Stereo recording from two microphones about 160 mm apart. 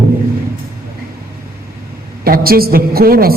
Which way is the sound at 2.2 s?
70° right (ahead or behind).